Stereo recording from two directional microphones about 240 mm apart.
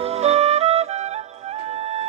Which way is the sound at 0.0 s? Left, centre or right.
Right.